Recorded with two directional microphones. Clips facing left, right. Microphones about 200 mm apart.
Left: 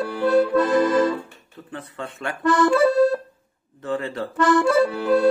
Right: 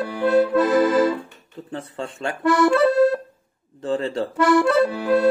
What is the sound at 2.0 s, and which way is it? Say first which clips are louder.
Speech: right 2 dB; 30° right (ahead or behind).